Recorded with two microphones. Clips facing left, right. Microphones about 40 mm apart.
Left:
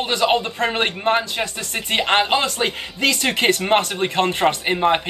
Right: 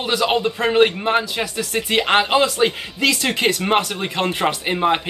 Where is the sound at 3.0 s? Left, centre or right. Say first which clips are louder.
Right 1 dB; left.